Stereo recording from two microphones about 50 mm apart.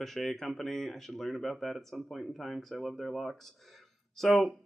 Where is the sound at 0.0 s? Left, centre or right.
Centre.